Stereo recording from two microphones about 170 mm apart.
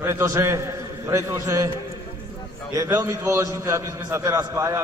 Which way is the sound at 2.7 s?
20° right (ahead or behind).